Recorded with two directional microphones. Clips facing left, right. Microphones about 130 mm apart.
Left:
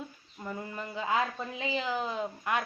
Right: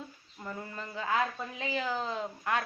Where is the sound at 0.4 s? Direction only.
15° left (ahead or behind).